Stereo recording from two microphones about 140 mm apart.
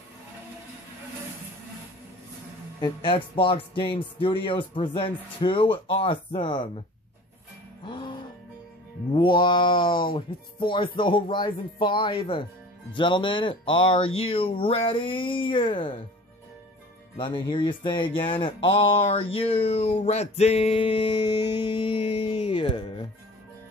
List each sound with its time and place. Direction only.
2.8 s speech: 35° left (ahead or behind)
7.8 s music: 35° left (ahead or behind)
9.1 s speech: 35° left (ahead or behind)
17.2 s speech: 35° left (ahead or behind)